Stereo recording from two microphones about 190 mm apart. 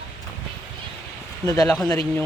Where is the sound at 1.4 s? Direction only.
15° left (ahead or behind).